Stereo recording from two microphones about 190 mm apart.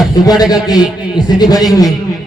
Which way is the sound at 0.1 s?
20° left (ahead or behind).